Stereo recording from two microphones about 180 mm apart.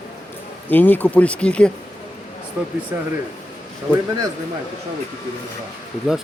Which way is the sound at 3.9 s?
5° left (ahead or behind).